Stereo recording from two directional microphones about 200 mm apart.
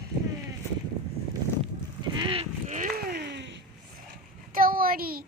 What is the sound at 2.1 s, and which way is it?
Livestock, 25° right (ahead or behind).